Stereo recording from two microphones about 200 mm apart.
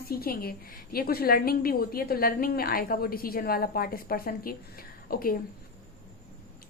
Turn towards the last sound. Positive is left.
turn(degrees=45)  # may be behind; listen again after turning